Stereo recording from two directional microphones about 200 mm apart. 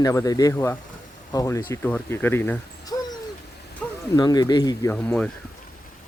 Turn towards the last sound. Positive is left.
turn(degrees=5)  # may be behind; listen again after turning